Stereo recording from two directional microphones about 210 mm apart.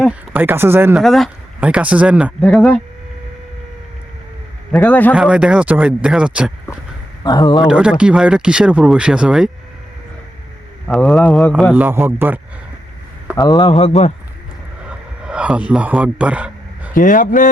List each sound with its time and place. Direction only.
0.1 s speech: 10° right (ahead or behind)
1.0 s speech: centre (ahead or behind)
2.4 s speech: 5° left (ahead or behind)
4.7 s a man's voice: 10° left (ahead or behind)
5.1 s speech: 5° right (ahead or behind)
7.3 s a man's voice: 20° left (ahead or behind)
7.6 s speech: 5° right (ahead or behind)
10.8 s speech: centre (ahead or behind)
11.7 s speech: 10° right (ahead or behind)
13.3 s a man's voice: 20° left (ahead or behind)
14.8 s a sound: 5° right (ahead or behind)
16.9 s speech: 40° left (ahead or behind)